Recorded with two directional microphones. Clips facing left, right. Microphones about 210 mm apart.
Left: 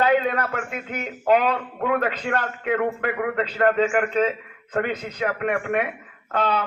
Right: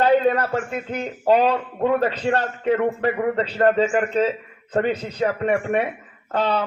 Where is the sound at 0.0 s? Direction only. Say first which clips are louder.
Right 3 dB; 35° right (ahead or behind).